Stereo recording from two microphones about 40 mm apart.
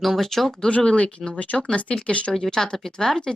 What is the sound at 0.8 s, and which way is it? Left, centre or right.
Speech, left.